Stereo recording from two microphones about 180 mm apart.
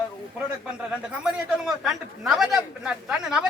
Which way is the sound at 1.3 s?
Centre (ahead or behind).